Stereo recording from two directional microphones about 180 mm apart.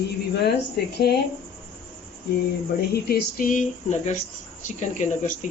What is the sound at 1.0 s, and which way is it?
Speech, 65° left (ahead or behind).